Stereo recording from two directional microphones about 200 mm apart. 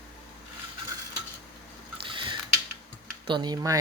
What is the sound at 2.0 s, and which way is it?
Scissors, 25° right (ahead or behind).